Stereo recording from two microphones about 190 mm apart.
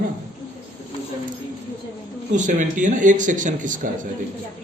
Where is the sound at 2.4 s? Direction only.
40° right (ahead or behind).